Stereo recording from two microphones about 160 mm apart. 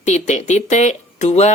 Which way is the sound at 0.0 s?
45° left (ahead or behind).